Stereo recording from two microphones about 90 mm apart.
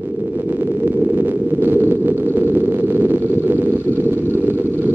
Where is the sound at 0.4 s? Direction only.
25° right (ahead or behind).